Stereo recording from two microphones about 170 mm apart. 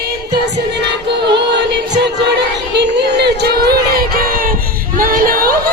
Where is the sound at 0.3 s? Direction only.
75° right (ahead or behind).